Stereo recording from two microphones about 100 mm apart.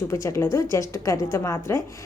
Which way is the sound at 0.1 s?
30° left (ahead or behind).